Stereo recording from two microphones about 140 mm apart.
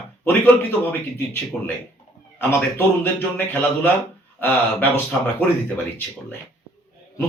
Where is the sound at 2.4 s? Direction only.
15° left (ahead or behind).